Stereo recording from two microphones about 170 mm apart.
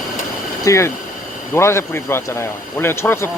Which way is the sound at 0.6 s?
15° left (ahead or behind).